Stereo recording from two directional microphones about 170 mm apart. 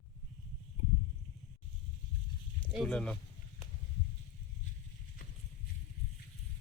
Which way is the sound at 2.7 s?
5° left (ahead or behind).